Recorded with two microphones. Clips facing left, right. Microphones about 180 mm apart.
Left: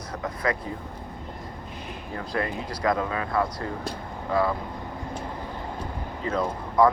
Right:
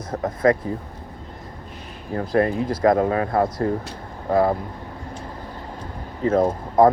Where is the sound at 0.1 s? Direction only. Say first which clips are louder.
Right 9 dB; 50° right (ahead or behind).